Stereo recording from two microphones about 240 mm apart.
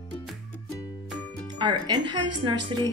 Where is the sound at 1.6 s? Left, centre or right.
Centre.